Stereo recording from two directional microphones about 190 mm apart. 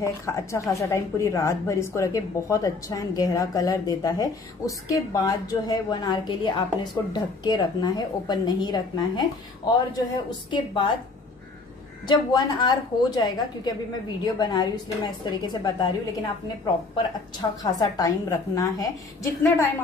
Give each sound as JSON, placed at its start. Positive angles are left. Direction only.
{"t": 0.0, "sound": "a woman's voice", "side_deg": 15}
{"t": 10.5, "sound": "a woman's voice", "side_deg": 25}
{"t": 12.1, "sound": "a woman's voice", "side_deg": 25}
{"t": 16.9, "sound": "a woman's voice", "side_deg": 20}